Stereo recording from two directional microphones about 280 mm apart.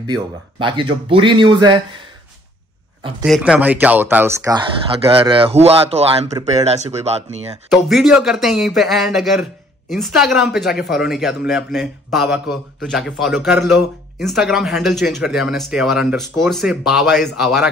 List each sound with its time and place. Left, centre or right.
0.0 s speech: centre
3.3 s speech: centre; by 7.2 s right
7.7 s a man's voice: centre